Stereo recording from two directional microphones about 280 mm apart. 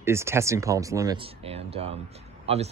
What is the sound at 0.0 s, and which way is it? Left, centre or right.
Speech, centre.